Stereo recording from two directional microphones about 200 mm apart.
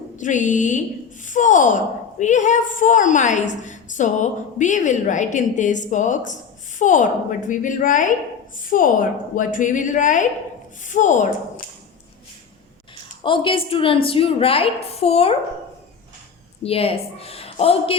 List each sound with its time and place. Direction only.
0.2 s a woman's voice: 40° left (ahead or behind)
13.2 s a woman's voice: 25° left (ahead or behind)
16.6 s speech: 30° left (ahead or behind)